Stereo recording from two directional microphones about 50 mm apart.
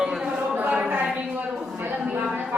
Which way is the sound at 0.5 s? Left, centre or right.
Right.